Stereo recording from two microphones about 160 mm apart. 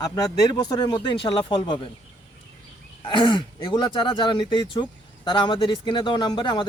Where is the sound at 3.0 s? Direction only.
30° left (ahead or behind).